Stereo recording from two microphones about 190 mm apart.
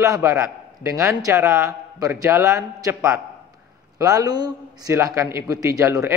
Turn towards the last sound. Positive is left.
turn(degrees=-15)  # may be behind; listen again after turning